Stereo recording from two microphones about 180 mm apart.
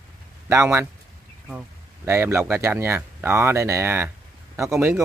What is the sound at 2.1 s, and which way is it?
Speech, 15° right (ahead or behind).